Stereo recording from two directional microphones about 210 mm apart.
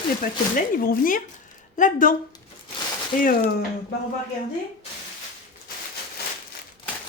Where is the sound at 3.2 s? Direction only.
45° left (ahead or behind).